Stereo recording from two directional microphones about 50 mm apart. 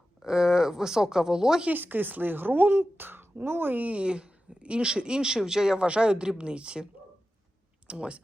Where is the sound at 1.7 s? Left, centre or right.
Right.